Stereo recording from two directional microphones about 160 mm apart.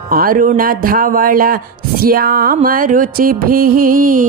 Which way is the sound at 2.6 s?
60° right (ahead or behind).